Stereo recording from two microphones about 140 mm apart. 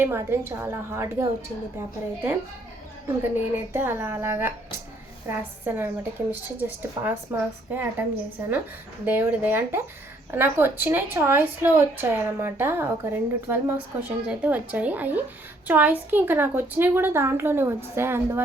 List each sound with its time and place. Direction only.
0.0 s a woman's voice: 15° right (ahead or behind)
3.7 s a woman's voice: 15° right (ahead or behind)
5.6 s a woman's voice: 15° right (ahead or behind)